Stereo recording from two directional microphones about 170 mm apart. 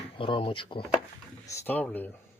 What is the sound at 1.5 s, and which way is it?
Speech, 10° left (ahead or behind).